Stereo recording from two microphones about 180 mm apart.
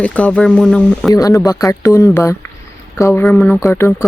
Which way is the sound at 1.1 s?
20° left (ahead or behind).